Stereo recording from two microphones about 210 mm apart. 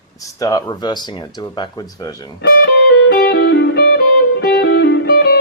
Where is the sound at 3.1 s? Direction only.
50° left (ahead or behind).